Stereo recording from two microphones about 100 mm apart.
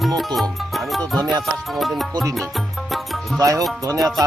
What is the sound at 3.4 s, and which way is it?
Speech, 35° right (ahead or behind).